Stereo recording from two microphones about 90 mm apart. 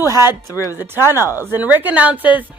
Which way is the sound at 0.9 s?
25° right (ahead or behind).